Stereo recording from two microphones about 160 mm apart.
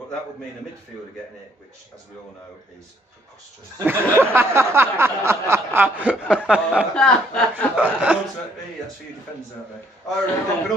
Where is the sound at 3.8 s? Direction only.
15° right (ahead or behind).